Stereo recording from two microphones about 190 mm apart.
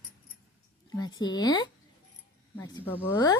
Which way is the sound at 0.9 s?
20° left (ahead or behind).